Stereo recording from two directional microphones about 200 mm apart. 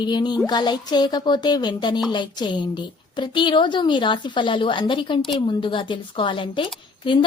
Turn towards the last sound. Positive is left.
turn(degrees=25)  # may be behind; listen again after turning